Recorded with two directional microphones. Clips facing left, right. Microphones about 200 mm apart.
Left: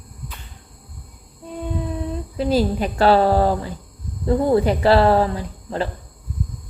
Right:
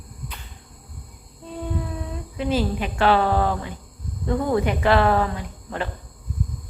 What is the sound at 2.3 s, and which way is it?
Speech, 35° left (ahead or behind).